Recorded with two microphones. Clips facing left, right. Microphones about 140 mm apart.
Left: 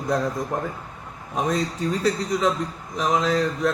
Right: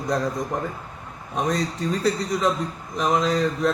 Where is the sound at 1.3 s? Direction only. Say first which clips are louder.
Even; centre (ahead or behind).